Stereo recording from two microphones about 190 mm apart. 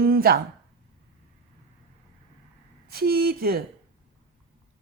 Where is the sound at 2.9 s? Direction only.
55° right (ahead or behind).